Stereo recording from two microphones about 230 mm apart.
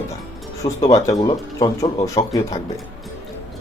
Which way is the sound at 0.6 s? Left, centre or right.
Centre.